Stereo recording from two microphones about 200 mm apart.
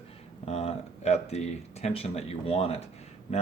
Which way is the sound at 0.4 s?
30° left (ahead or behind).